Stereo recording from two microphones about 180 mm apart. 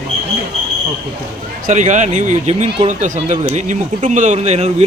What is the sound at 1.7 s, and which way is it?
Speech, 45° right (ahead or behind).